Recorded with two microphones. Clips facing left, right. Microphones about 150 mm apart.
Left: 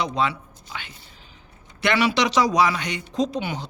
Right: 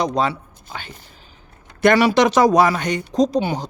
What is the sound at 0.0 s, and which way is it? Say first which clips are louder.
Speech: right 4 dB; 40° right (ahead or behind).